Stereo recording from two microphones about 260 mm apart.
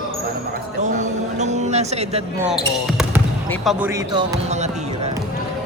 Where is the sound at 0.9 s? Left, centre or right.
Right.